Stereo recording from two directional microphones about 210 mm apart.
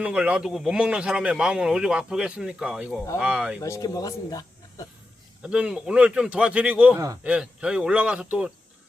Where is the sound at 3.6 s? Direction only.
15° left (ahead or behind).